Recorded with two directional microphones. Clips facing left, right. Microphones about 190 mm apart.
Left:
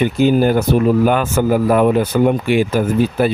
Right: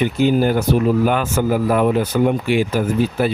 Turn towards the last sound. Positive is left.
turn(degrees=55)  # may be behind; listen again after turning